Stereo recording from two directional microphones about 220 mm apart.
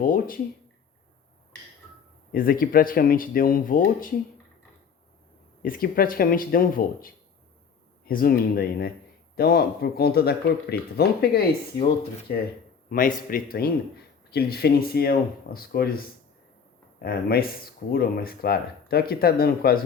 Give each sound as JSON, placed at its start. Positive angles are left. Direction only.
{"t": 0.0, "sound": "speech", "side_deg": 40}
{"t": 2.3, "sound": "speech", "side_deg": 40}
{"t": 5.6, "sound": "speech", "side_deg": 40}
{"t": 12.9, "sound": "speech", "side_deg": 40}